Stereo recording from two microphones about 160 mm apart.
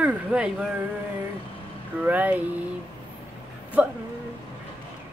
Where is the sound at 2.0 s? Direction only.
10° right (ahead or behind).